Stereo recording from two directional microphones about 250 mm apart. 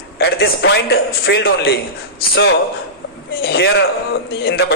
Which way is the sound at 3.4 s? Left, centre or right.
Left.